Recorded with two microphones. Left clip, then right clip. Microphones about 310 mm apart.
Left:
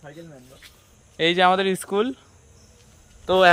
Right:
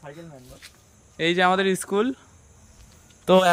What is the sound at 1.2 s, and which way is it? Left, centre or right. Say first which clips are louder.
Speech: left 2 dB; centre.